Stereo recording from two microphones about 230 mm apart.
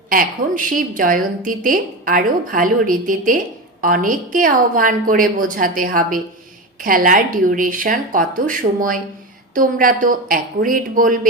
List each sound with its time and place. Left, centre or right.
0.1 s a woman's voice: right